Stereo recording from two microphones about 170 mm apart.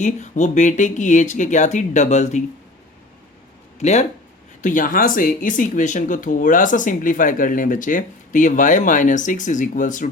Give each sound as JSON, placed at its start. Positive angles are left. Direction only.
{"t": 0.0, "sound": "speech", "side_deg": 45}
{"t": 3.8, "sound": "speech", "side_deg": 40}